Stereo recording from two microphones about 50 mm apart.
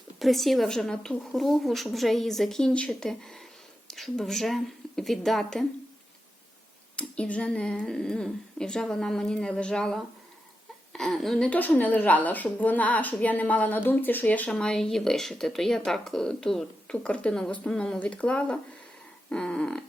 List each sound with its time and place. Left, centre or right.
0.2 s a woman's voice: centre
6.9 s a woman's voice: left
11.1 s a woman's voice: centre
11.5 s a woman's voice: left
14.6 s a woman's voice: centre
18.0 s speech: left
19.3 s a sound: centre